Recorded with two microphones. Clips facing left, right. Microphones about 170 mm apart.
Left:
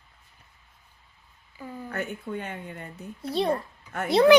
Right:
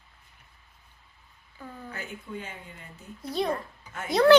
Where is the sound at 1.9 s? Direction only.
60° left (ahead or behind).